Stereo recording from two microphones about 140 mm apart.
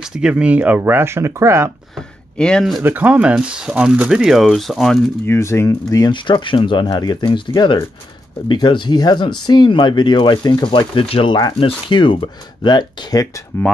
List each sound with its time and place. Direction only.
0.0 s speech: 5° right (ahead or behind)
2.3 s speech: 5° left (ahead or behind)
2.8 s speech: 10° right (ahead or behind)
5.2 s speech: 20° left (ahead or behind)